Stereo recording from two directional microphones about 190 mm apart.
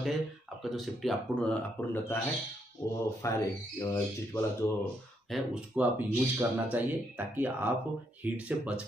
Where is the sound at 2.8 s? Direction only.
20° left (ahead or behind).